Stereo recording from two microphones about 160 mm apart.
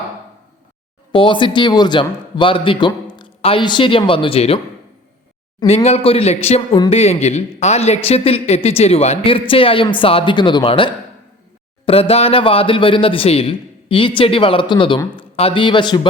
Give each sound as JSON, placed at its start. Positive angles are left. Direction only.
{"t": 1.1, "sound": "a man's voice", "side_deg": 30}
{"t": 5.6, "sound": "a man's voice", "side_deg": 40}